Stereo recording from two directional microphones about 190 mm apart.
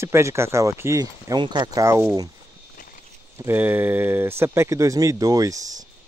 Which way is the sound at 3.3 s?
10° right (ahead or behind).